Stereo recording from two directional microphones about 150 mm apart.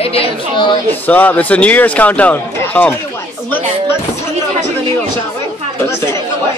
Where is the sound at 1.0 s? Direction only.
10° left (ahead or behind).